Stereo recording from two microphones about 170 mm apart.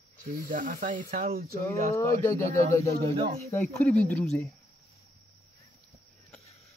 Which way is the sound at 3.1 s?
30° right (ahead or behind).